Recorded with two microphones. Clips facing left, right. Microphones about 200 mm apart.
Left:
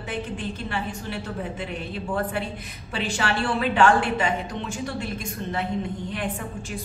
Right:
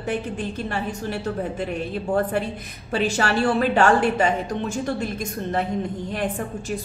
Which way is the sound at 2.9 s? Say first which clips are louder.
Right 5 dB; 40° right (ahead or behind).